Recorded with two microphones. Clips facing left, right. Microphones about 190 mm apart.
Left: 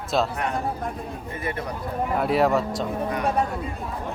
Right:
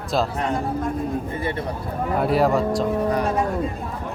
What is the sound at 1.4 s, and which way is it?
Speech, 30° right (ahead or behind).